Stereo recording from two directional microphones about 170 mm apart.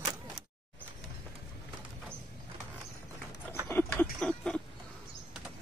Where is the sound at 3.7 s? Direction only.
10° left (ahead or behind).